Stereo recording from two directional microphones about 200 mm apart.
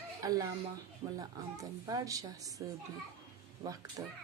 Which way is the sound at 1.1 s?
20° right (ahead or behind).